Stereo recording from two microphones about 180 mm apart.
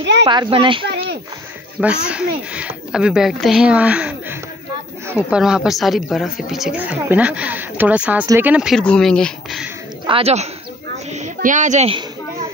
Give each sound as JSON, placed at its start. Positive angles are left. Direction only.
{"t": 0.2, "sound": "speech", "side_deg": -30}
{"t": 2.0, "sound": "speech", "side_deg": -5}
{"t": 10.0, "sound": "speech", "side_deg": -30}
{"t": 11.1, "sound": "a sound", "side_deg": -40}